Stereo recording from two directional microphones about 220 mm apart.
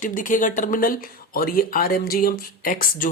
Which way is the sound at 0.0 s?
35° left (ahead or behind).